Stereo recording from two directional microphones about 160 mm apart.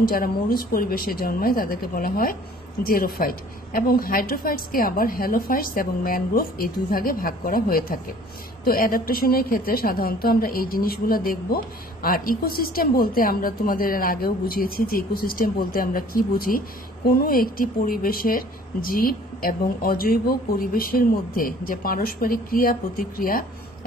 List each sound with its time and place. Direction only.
0.0 s a woman's voice: 65° left (ahead or behind)